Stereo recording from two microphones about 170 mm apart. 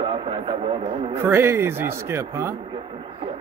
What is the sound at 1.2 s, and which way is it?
A man's voice, 15° right (ahead or behind).